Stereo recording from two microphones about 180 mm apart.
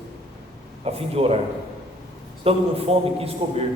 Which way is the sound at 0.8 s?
35° right (ahead or behind).